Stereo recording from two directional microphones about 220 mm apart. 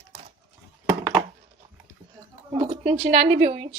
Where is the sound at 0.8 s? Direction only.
5° right (ahead or behind).